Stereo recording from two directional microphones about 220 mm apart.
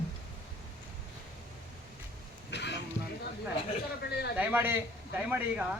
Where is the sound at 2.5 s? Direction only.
50° left (ahead or behind).